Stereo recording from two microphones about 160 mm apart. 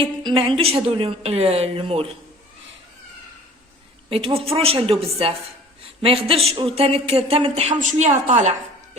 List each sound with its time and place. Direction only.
0.0 s speech: 30° right (ahead or behind)
4.1 s speech: 35° right (ahead or behind)